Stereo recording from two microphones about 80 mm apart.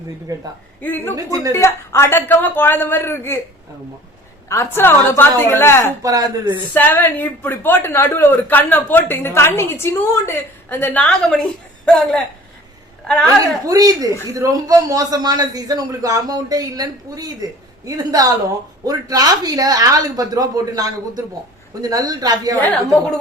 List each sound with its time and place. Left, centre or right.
0.3 s speech: right
0.8 s a woman's voice: left
1.1 s a man's voice: right
1.5 s a woman's voice: left
4.4 s a woman's voice: left
6.0 s a man's voice: right
6.7 s a woman's voice: left
11.0 s a woman's voice: centre
13.2 s a man's voice: right